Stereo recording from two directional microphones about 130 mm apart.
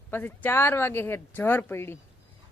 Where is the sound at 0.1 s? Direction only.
15° left (ahead or behind).